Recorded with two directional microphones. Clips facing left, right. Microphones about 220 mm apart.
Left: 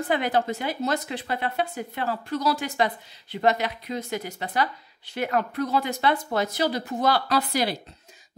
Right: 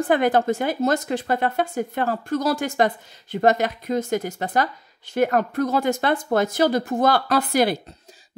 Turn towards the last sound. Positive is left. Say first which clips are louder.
# right 6 dB
turn(degrees=-50)  # may be behind; listen again after turning